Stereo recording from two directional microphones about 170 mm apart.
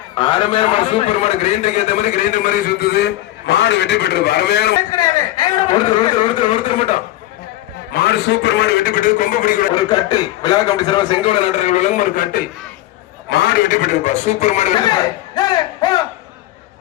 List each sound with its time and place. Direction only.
0.2 s a man's voice: 25° left (ahead or behind); by 4.8 s 70° left (ahead or behind)
4.9 s a sound: 20° left (ahead or behind)
7.9 s a man's voice: 70° left (ahead or behind); by 9.6 s 50° left (ahead or behind)
9.7 s a man's voice: 25° left (ahead or behind); by 12.5 s 55° left (ahead or behind)
13.3 s a man's voice: 70° left (ahead or behind); by 14.8 s 45° left (ahead or behind)
15.4 s a sound: 25° left (ahead or behind)